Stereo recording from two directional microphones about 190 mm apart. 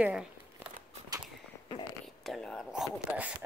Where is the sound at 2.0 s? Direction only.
Centre (ahead or behind).